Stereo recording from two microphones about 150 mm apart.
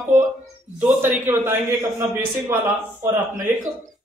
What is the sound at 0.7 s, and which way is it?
A man's voice, 10° right (ahead or behind).